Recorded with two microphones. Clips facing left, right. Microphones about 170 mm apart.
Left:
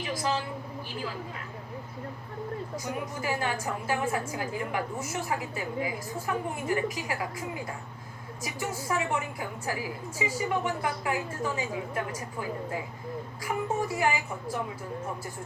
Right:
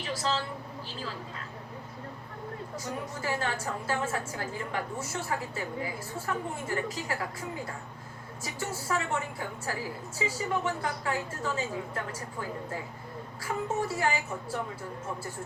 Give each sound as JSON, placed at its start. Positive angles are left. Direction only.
{"t": 0.0, "sound": "a woman's voice", "side_deg": 15}
{"t": 2.7, "sound": "a woman's voice", "side_deg": 15}
{"t": 8.4, "sound": "a woman's voice", "side_deg": 15}